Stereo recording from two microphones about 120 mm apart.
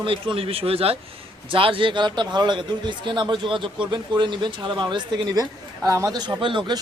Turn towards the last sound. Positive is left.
turn(degrees=-40)  # may be behind; listen again after turning